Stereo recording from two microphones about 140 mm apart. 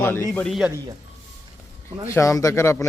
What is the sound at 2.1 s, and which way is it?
Speech, 25° left (ahead or behind).